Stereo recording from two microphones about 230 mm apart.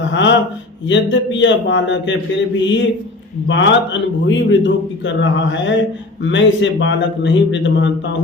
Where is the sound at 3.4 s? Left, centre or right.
Left.